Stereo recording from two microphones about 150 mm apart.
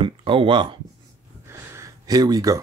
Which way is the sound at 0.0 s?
35° right (ahead or behind).